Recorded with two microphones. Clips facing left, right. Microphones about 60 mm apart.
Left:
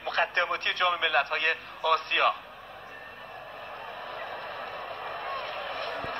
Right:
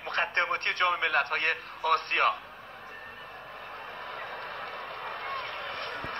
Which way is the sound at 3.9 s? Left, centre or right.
Right.